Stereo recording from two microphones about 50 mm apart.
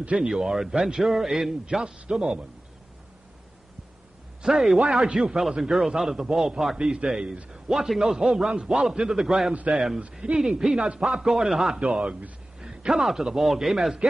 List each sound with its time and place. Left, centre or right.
0.2 s a man's voice: centre
4.4 s a man's voice: centre
7.7 s a man's voice: centre
11.8 s a man's voice: centre